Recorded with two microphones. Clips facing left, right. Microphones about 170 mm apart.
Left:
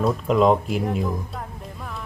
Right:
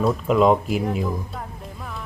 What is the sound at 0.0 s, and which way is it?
Speech, centre (ahead or behind).